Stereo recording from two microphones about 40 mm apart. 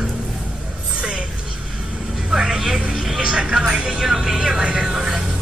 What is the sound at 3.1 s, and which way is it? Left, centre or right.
A man's voice, right.